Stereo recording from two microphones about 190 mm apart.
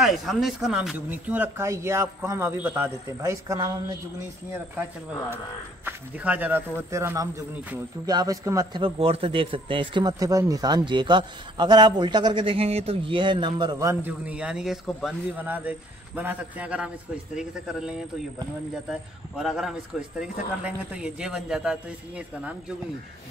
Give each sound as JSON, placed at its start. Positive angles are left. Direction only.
{"t": 0.0, "sound": "speech", "side_deg": 0}
{"t": 5.9, "sound": "a man's voice", "side_deg": -10}